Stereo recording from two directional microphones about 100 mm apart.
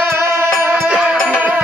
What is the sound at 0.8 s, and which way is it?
Music, 10° right (ahead or behind).